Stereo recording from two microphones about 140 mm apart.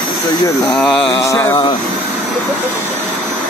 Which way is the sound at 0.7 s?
5° left (ahead or behind).